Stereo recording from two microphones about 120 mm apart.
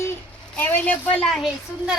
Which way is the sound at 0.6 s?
15° left (ahead or behind).